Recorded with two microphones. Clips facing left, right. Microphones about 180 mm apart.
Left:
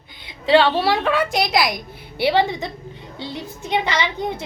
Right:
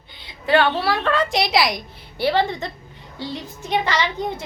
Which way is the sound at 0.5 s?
25° left (ahead or behind).